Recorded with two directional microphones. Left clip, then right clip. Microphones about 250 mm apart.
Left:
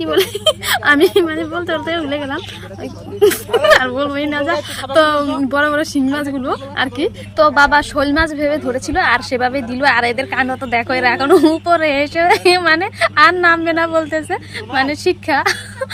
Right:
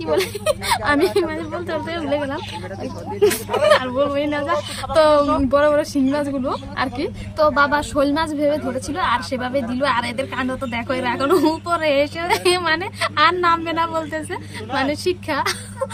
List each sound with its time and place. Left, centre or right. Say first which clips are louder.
0.0 s a woman's voice: left 6 dB; centre